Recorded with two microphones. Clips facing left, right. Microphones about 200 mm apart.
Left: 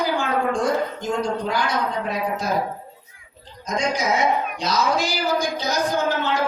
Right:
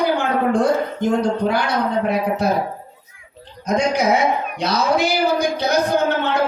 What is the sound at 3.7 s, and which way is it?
Speech, 60° right (ahead or behind).